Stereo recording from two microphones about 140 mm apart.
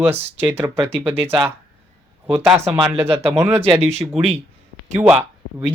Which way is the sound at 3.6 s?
45° right (ahead or behind).